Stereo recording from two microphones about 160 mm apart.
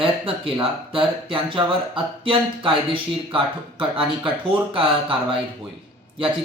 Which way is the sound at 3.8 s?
35° right (ahead or behind).